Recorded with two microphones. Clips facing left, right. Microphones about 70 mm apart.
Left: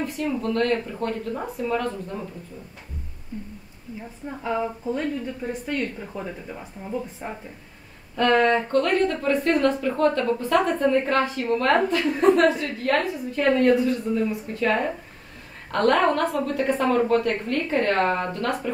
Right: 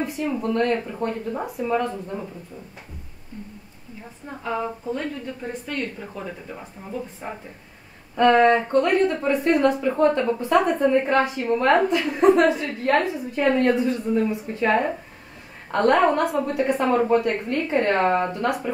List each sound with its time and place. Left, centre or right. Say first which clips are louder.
0.0 s a woman's voice: right 1 dB; centre
4.4 s a woman's voice: left 1 dB; centre
8.2 s a woman's voice: right 3 dB; centre